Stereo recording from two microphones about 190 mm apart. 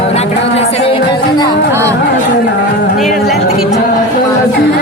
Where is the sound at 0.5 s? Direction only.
35° left (ahead or behind).